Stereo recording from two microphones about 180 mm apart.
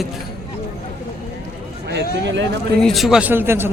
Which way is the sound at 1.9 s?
85° right.